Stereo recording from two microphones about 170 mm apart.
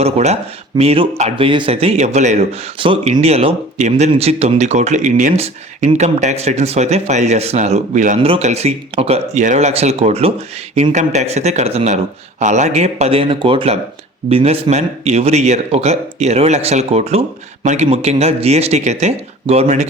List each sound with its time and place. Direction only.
0.0 s speech: 40° right (ahead or behind)